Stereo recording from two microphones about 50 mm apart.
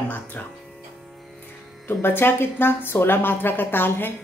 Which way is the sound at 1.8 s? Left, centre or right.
Left.